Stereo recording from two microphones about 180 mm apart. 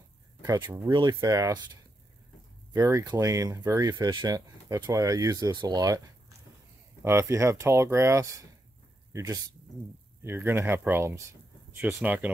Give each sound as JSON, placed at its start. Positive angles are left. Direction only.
{"t": 0.4, "sound": "speech", "side_deg": -25}
{"t": 2.7, "sound": "speech", "side_deg": -20}